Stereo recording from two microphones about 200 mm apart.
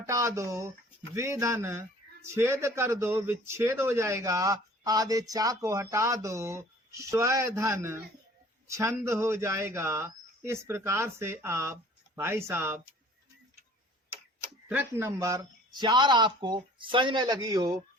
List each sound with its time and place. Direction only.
0.1 s a man's voice: 15° right (ahead or behind)
14.7 s speech: 10° right (ahead or behind)